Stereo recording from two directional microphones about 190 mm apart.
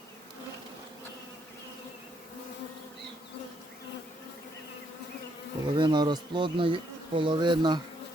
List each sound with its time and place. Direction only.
5.7 s speech: 25° right (ahead or behind)